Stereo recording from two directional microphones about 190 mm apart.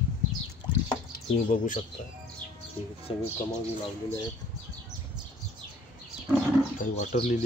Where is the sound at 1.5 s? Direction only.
40° left (ahead or behind).